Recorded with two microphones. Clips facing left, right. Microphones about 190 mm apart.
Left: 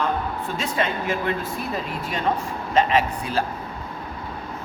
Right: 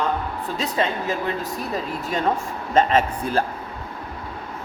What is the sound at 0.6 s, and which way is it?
Speech, 35° right (ahead or behind).